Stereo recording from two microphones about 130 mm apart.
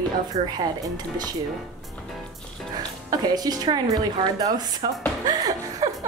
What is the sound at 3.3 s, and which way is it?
A woman's voice, 30° right (ahead or behind).